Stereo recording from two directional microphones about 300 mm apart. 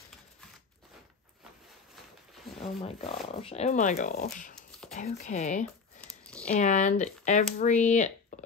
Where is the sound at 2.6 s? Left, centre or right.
Centre.